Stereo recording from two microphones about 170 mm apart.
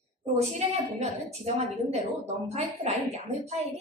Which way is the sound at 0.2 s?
40° right (ahead or behind).